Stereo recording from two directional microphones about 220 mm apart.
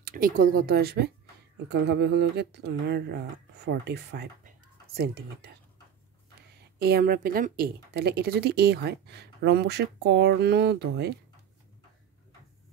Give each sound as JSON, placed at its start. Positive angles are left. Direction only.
{"t": 0.0, "sound": "speech", "side_deg": -40}
{"t": 6.8, "sound": "speech", "side_deg": -45}